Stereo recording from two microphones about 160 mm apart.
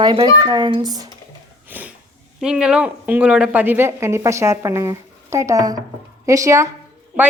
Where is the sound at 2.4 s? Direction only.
5° right (ahead or behind).